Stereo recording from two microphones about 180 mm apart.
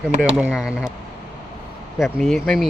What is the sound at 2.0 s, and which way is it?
Speech, centre (ahead or behind).